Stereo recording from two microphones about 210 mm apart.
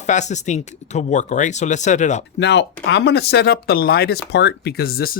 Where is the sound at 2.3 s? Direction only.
55° left (ahead or behind).